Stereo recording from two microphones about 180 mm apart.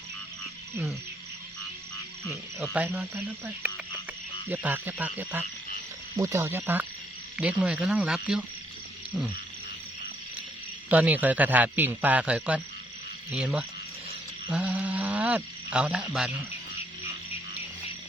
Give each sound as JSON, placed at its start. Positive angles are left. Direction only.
{"t": 2.7, "sound": "a man's voice", "side_deg": -10}
{"t": 9.1, "sound": "frog", "side_deg": -5}
{"t": 10.8, "sound": "a man's voice", "side_deg": -10}